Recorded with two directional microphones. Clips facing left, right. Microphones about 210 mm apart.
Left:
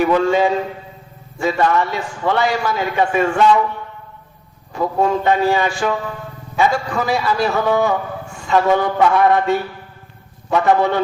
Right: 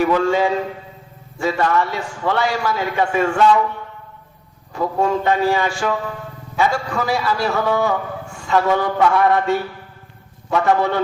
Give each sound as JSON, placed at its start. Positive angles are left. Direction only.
{"t": 0.0, "sound": "a man's voice", "side_deg": 20}
{"t": 4.7, "sound": "a man's voice", "side_deg": 20}